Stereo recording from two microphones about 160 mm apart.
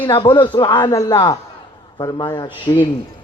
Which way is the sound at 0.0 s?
30° left (ahead or behind).